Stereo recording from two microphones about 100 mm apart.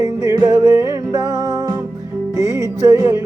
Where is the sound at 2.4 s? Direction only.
35° right (ahead or behind).